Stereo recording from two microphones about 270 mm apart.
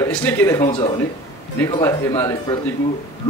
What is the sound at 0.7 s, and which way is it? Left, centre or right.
A man's voice, centre.